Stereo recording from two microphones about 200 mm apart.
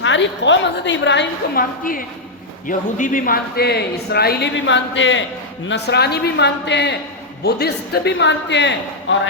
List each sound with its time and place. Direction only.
0.0 s a woman's voice: 65° left (ahead or behind)
1.8 s a woman's voice: 45° left (ahead or behind); by 9.1 s 60° left (ahead or behind)